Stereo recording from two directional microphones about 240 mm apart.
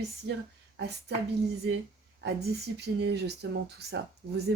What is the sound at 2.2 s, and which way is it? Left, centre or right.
Speech, right.